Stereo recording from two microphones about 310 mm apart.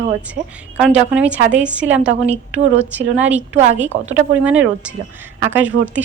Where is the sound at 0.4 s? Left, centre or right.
Right.